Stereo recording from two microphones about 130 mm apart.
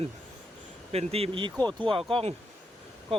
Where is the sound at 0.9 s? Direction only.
50° right (ahead or behind).